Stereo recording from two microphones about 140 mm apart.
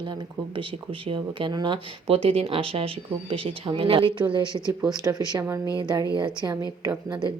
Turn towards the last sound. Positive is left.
turn(degrees=-35)  # may be behind; listen again after turning